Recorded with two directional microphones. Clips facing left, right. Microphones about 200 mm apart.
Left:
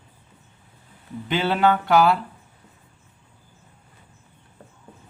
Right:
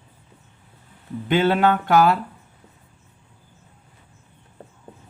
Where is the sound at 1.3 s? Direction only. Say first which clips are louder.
Right 2 dB; 50° right (ahead or behind).